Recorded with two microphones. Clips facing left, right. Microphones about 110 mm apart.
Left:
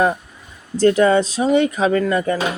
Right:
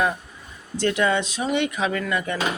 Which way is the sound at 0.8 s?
40° left (ahead or behind).